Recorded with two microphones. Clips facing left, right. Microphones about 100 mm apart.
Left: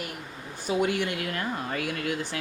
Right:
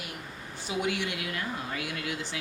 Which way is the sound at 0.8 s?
50° left (ahead or behind).